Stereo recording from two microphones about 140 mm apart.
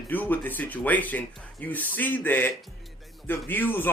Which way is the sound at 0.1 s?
15° left (ahead or behind).